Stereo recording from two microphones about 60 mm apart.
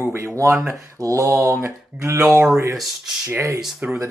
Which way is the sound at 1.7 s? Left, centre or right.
Right.